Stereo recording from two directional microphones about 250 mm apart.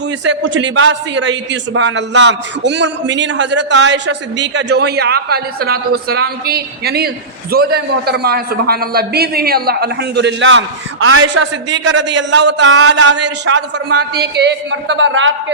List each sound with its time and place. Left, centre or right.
0.3 s a man's voice: right